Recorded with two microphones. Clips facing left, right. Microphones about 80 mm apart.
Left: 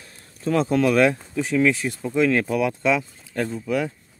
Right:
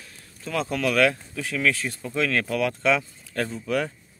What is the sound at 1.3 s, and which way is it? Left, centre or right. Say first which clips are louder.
Speech: left 5 dB; left.